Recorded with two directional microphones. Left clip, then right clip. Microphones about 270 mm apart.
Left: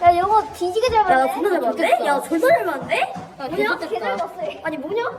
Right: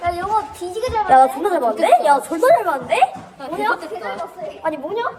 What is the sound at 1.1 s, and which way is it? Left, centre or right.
A woman's voice, centre.